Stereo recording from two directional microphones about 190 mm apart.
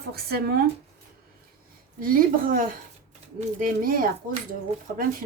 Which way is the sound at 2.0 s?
45° right (ahead or behind).